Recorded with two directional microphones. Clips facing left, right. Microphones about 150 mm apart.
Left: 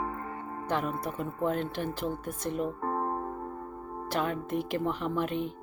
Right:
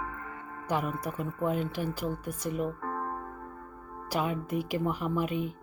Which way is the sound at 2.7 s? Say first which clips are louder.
Left 3 dB; 35° left (ahead or behind).